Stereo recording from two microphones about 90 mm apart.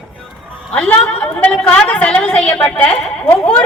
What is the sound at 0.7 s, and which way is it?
A woman's voice, 15° left (ahead or behind).